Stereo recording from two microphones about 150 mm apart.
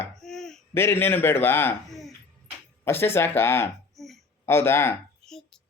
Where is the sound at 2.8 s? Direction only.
15° left (ahead or behind).